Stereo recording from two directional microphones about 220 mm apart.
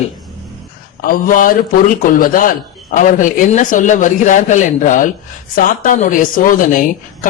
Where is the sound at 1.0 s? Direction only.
40° left (ahead or behind).